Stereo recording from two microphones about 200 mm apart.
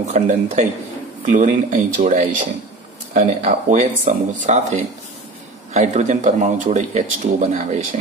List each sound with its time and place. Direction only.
0.0 s speech: 35° right (ahead or behind)